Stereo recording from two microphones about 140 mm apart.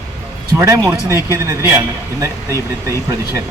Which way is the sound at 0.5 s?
20° right (ahead or behind).